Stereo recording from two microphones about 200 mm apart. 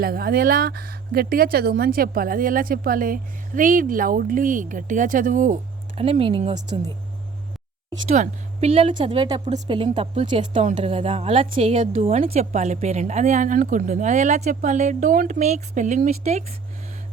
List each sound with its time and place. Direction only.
0.0 s speech: 50° right (ahead or behind)
6.0 s a woman's voice: 30° right (ahead or behind)
8.0 s a woman's voice: 35° right (ahead or behind)